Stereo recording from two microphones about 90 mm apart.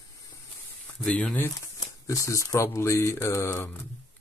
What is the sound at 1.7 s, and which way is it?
Speech, 35° left (ahead or behind).